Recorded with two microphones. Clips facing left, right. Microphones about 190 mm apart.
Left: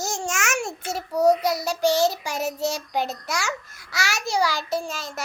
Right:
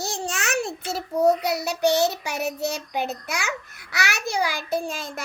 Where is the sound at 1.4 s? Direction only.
65° right (ahead or behind).